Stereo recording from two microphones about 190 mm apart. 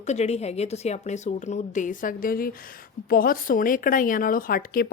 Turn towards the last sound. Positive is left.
turn(degrees=50)  # may be behind; listen again after turning